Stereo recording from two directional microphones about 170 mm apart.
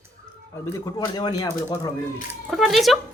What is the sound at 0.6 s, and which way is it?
Speech, 20° left (ahead or behind).